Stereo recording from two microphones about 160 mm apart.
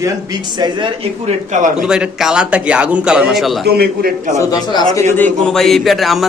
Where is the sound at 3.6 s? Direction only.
80° right.